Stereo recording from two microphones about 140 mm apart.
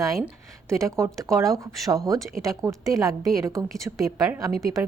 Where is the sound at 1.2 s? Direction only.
25° right (ahead or behind).